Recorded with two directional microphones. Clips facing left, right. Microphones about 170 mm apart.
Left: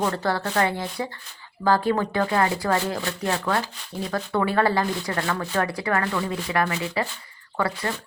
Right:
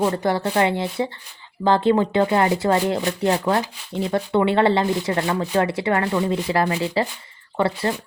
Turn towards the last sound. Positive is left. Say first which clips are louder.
# right 5 dB
turn(degrees=-25)  # may be behind; listen again after turning